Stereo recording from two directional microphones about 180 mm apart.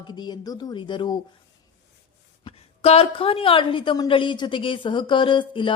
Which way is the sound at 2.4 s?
35° left (ahead or behind).